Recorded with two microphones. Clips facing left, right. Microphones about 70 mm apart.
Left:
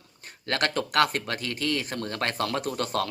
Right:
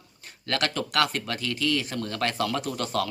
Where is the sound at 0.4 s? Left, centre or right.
Left.